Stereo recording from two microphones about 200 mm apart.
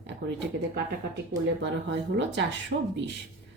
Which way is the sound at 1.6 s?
60° right (ahead or behind).